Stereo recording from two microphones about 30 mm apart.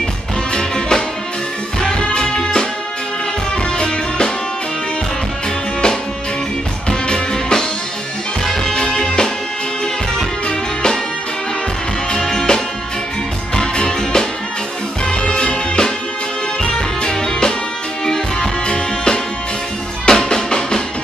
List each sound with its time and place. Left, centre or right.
0.5 s music: left
2.3 s music: left
3.7 s music: left
6.9 s music: left
8.9 s music: left
12.1 s music: left